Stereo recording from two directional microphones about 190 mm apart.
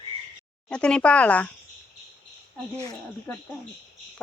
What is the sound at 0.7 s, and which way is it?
Speech, 5° left (ahead or behind).